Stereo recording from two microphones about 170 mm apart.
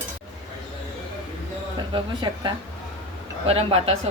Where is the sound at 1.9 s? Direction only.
25° right (ahead or behind).